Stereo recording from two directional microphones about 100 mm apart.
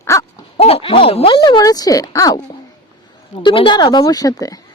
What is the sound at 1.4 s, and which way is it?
Speech, 45° left (ahead or behind).